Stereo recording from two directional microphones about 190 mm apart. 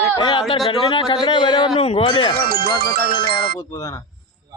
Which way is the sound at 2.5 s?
55° right (ahead or behind).